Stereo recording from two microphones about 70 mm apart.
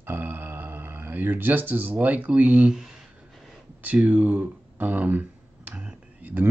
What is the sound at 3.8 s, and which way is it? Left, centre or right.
Speech, right.